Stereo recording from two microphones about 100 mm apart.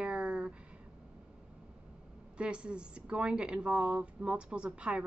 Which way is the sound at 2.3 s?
10° right (ahead or behind).